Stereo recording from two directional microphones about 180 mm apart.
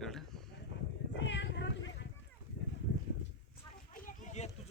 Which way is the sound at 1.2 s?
85° left.